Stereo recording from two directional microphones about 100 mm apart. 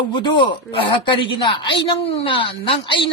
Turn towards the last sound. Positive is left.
turn(degrees=60)  # may be behind; listen again after turning